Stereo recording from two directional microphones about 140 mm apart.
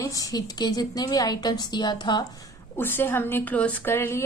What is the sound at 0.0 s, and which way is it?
A woman's voice, 25° left (ahead or behind).